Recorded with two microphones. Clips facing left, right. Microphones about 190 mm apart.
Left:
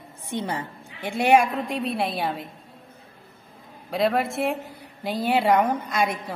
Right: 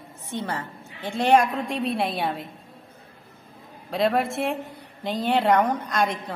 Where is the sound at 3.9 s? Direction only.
Centre (ahead or behind).